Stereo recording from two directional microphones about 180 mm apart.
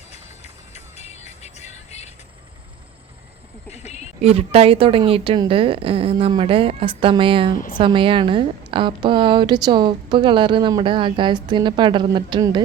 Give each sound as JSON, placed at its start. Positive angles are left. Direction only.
{"t": 0.1, "sound": "music", "side_deg": 35}
{"t": 3.7, "sound": "a sound", "side_deg": 35}
{"t": 4.2, "sound": "a woman's voice", "side_deg": -35}